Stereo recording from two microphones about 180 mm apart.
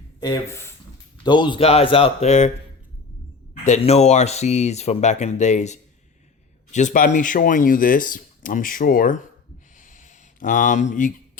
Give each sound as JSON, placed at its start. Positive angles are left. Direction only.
{"t": 0.2, "sound": "speech", "side_deg": 15}
{"t": 3.6, "sound": "speech", "side_deg": 40}
{"t": 9.7, "sound": "a sound", "side_deg": 45}